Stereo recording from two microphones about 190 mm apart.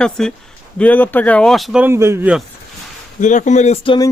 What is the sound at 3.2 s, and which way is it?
Speech, 40° left (ahead or behind).